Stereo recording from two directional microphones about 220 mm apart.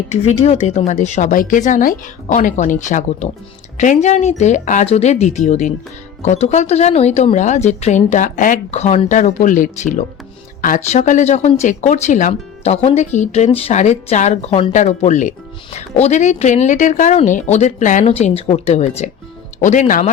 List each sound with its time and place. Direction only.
0.1 s speech: 30° left (ahead or behind)